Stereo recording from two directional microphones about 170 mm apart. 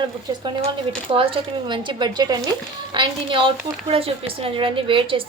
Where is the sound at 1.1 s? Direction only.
30° right (ahead or behind).